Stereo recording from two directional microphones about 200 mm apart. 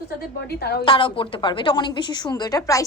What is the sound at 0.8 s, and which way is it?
A woman's voice, 25° left (ahead or behind).